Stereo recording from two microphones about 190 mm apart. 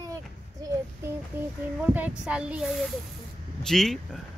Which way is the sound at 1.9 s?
5° right (ahead or behind).